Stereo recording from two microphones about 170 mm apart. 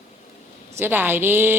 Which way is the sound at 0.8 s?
10° right (ahead or behind).